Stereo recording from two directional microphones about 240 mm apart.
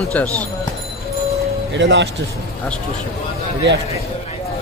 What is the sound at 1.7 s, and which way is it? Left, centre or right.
Speech, right.